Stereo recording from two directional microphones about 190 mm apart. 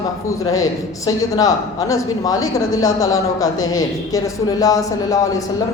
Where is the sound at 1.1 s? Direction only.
20° left (ahead or behind).